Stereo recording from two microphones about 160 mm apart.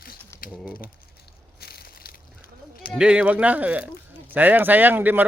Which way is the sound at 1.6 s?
75° left (ahead or behind).